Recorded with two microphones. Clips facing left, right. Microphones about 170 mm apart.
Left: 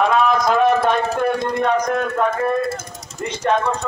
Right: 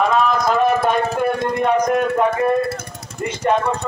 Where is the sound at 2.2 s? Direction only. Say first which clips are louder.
Right 2 dB; 60° right (ahead or behind).